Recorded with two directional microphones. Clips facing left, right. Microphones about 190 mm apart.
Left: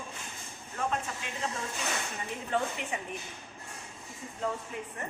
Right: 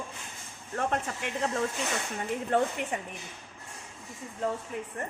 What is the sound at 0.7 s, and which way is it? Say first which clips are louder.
A woman's voice: right 3 dB; 60° right (ahead or behind).